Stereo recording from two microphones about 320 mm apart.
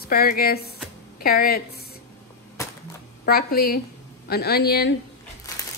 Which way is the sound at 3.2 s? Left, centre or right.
Left.